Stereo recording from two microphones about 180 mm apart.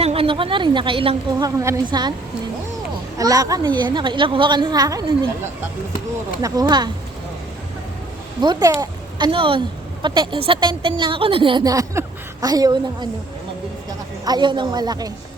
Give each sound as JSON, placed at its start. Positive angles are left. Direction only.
{"t": 0.0, "sound": "a woman's voice", "side_deg": -30}
{"t": 3.2, "sound": "a woman's voice", "side_deg": -20}
{"t": 6.4, "sound": "a woman's voice", "side_deg": -20}
{"t": 8.4, "sound": "a woman's voice", "side_deg": -25}
{"t": 14.3, "sound": "a woman's voice", "side_deg": -25}